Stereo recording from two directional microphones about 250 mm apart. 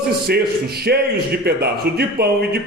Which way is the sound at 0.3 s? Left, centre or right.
Right.